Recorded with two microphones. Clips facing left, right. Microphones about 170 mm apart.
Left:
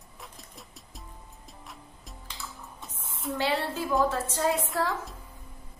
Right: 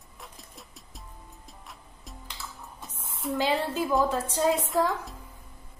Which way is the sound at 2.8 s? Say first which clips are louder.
Right 2 dB; centre (ahead or behind).